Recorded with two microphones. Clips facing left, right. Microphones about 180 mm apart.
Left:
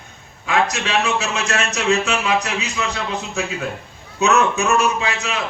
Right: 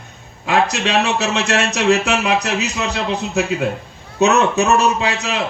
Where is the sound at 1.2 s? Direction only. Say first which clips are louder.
Right 4 dB; 70° right (ahead or behind).